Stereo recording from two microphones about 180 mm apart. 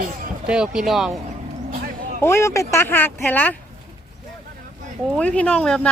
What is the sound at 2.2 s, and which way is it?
Speech, 15° left (ahead or behind).